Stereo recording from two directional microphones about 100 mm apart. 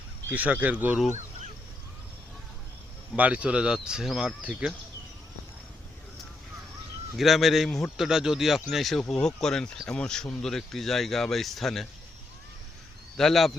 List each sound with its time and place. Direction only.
0.3 s speech: 15° right (ahead or behind)
3.2 s speech: 15° right (ahead or behind)
7.2 s speech: centre (ahead or behind)
13.1 s speech: 5° left (ahead or behind)